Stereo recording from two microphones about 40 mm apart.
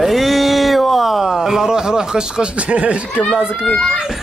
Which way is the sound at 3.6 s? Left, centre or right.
Centre.